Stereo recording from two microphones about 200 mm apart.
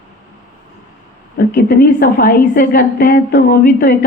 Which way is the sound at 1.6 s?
45° left (ahead or behind).